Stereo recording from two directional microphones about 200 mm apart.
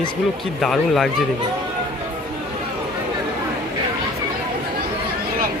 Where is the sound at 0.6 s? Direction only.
Centre (ahead or behind).